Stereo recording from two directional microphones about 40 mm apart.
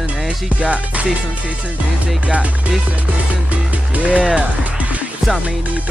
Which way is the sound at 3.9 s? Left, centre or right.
Right.